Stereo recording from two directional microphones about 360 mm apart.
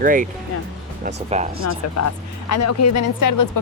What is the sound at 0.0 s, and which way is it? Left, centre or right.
Speech, right.